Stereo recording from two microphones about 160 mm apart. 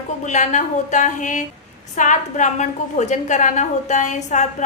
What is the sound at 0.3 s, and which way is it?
A woman's voice, 50° left (ahead or behind).